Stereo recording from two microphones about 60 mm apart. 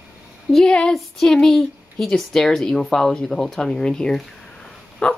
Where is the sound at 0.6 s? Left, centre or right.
Centre.